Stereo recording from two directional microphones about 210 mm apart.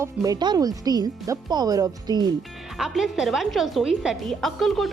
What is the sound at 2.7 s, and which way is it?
A woman's voice, centre (ahead or behind).